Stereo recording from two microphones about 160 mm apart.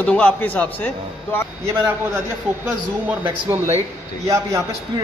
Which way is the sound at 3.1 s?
15° right (ahead or behind).